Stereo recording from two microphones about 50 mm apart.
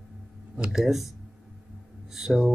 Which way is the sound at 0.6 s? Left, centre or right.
Centre.